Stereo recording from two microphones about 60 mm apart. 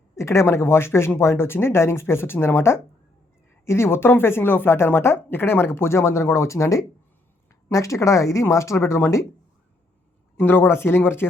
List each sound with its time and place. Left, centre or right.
0.2 s speech: left
10.4 s speech: left